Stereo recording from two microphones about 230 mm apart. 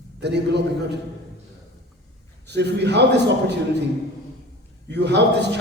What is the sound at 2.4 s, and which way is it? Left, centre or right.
A man's voice, right.